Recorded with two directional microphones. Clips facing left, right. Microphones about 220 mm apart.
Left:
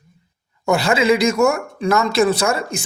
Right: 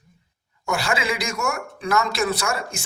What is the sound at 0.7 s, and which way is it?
Speech, 25° left (ahead or behind).